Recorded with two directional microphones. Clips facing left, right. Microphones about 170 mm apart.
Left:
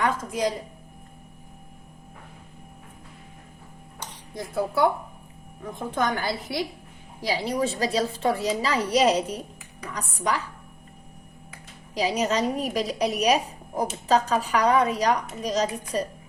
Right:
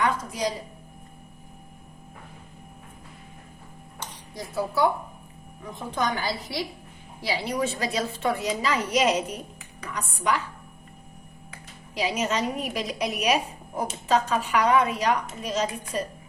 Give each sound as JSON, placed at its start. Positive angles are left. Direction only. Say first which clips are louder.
{"t": 0.0, "sound": "speech", "louder": "left 1 dB", "side_deg": 55}
{"t": 4.4, "sound": "a woman's voice", "louder": "left 1 dB", "side_deg": 55}
{"t": 7.2, "sound": "speech", "louder": "left 2 dB", "side_deg": 40}
{"t": 11.9, "sound": "speech", "louder": "left 2 dB", "side_deg": 35}